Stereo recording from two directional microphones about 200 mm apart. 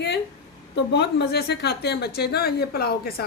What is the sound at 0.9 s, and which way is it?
A woman's voice, 55° left (ahead or behind).